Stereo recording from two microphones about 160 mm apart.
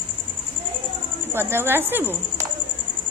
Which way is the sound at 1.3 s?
15° right (ahead or behind).